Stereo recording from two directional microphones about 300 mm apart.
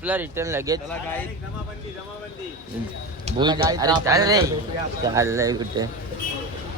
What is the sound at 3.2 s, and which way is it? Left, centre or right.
Speech, centre.